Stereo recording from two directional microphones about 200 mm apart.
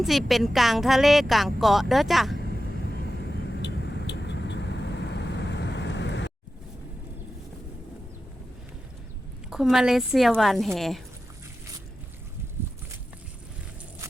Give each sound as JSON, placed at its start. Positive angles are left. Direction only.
{"t": 0.0, "sound": "a woman's voice", "side_deg": 0}
{"t": 3.6, "sound": "vehicle", "side_deg": 55}
{"t": 9.5, "sound": "a woman's voice", "side_deg": 0}